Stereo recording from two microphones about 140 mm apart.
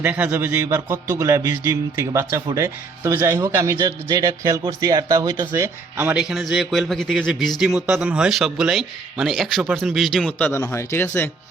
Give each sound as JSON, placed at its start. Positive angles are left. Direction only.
{"t": 0.0, "sound": "a man's voice", "side_deg": -10}
{"t": 6.1, "sound": "speech", "side_deg": -5}